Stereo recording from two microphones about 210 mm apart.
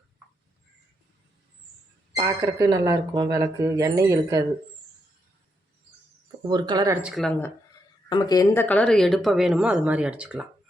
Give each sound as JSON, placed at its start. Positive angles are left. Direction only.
{"t": 2.1, "sound": "speech", "side_deg": -15}
{"t": 6.4, "sound": "speech", "side_deg": -20}
{"t": 7.1, "sound": "speech", "side_deg": 0}
{"t": 8.1, "sound": "speech", "side_deg": 15}